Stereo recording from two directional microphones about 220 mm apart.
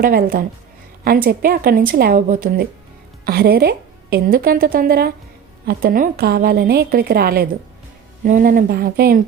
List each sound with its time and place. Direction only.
0.0 s a woman's voice: 40° right (ahead or behind)